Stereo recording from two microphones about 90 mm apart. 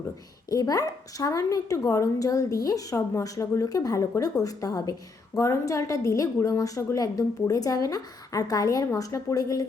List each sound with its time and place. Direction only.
0.5 s a woman's voice: 45° left (ahead or behind)